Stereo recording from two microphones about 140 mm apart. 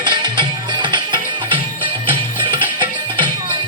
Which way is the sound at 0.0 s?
35° right (ahead or behind).